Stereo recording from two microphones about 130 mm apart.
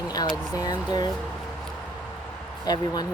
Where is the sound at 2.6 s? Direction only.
30° left (ahead or behind).